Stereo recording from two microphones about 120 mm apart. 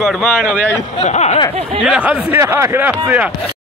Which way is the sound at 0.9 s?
70° left (ahead or behind).